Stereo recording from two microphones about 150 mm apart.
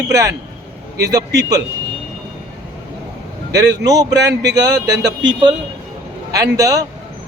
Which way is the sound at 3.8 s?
25° right (ahead or behind).